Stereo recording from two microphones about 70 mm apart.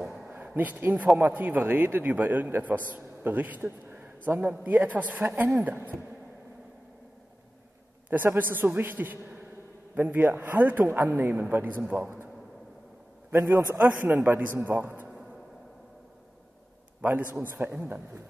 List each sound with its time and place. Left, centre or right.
0.0 s a sound: centre
0.6 s a man's voice: right
8.1 s a man's voice: right
13.3 s a man's voice: right
17.0 s a man's voice: right